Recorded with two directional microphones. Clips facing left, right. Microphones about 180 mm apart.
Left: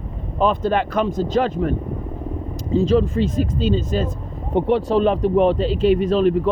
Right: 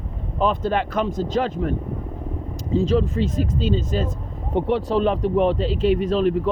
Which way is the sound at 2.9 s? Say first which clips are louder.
Left 3 dB; 60° left (ahead or behind).